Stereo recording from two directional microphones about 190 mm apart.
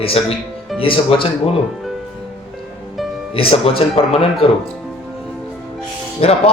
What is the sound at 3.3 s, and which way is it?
Speech, 30° left (ahead or behind).